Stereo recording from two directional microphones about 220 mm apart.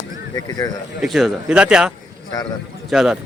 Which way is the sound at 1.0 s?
Centre (ahead or behind).